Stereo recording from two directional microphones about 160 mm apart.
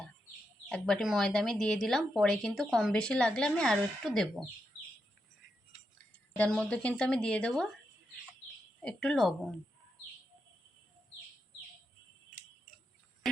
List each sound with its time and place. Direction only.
0.7 s a woman's voice: 5° left (ahead or behind)
6.3 s a woman's voice: 10° left (ahead or behind)
8.8 s a woman's voice: 5° left (ahead or behind)